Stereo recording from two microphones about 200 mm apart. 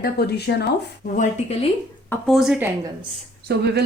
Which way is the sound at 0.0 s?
55° left (ahead or behind).